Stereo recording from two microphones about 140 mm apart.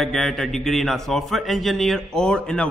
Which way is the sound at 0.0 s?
Centre (ahead or behind).